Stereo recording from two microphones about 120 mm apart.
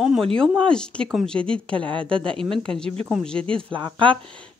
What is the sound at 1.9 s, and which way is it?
Speech, 45° right (ahead or behind).